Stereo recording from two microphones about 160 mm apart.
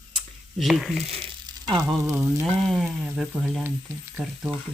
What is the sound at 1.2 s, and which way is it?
Frying, 30° right (ahead or behind).